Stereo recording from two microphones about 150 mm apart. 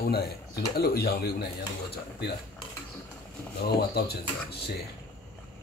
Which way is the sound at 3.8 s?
90° left.